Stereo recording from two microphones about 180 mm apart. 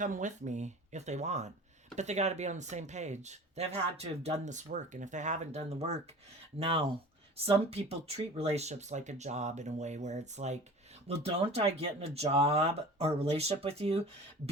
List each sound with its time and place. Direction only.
0.0 s speech: 45° right (ahead or behind)